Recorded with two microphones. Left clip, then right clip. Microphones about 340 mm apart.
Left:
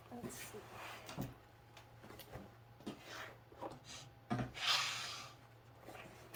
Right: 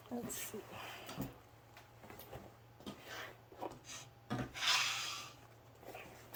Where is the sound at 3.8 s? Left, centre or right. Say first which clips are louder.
Right 2 dB; centre.